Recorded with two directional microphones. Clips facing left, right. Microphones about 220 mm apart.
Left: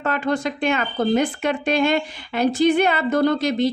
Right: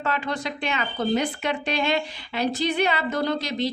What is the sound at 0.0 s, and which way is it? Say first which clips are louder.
A woman's voice: left 6 dB; 50° left (ahead or behind).